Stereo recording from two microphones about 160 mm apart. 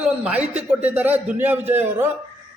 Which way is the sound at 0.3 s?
10° right (ahead or behind).